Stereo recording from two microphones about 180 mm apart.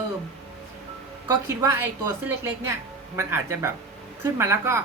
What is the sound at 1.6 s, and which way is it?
A woman's voice, 15° right (ahead or behind).